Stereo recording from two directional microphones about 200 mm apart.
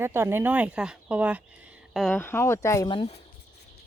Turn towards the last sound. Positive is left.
turn(degrees=25)  # may be behind; listen again after turning